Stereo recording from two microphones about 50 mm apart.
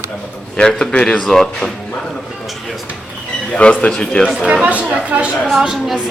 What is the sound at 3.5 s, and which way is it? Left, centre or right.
Speech, left.